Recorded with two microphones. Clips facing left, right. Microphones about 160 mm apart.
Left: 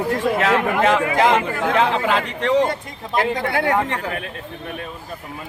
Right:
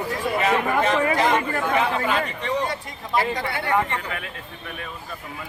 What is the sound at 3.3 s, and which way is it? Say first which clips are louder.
Speech: left 7 dB; 55° left (ahead or behind).